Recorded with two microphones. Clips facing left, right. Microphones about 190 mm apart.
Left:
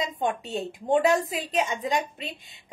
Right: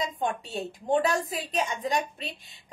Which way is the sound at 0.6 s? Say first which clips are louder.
Left 2 dB; 20° left (ahead or behind).